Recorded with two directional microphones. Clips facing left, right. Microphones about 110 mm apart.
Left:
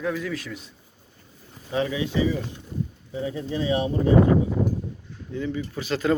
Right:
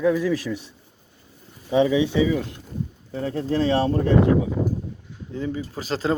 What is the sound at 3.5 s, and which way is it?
Speech, 80° right.